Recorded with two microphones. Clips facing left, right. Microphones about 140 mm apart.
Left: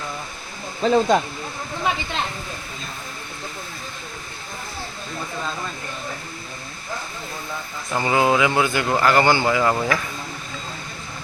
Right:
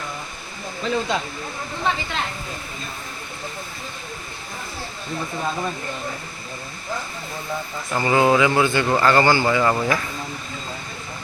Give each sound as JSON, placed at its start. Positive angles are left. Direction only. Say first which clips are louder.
{"t": 0.8, "sound": "speech", "louder": "left 7 dB", "side_deg": 40}
{"t": 7.9, "sound": "speech", "louder": "right 1 dB", "side_deg": 10}
{"t": 9.6, "sound": "speech", "louder": "even", "side_deg": 5}